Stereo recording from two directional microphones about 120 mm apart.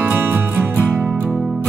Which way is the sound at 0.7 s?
5° right (ahead or behind).